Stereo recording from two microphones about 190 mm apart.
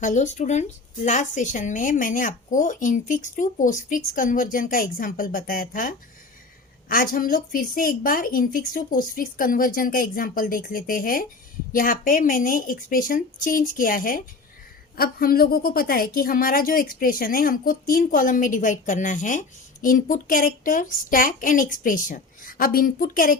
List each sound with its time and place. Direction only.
0.0 s a woman's voice: 40° left (ahead or behind)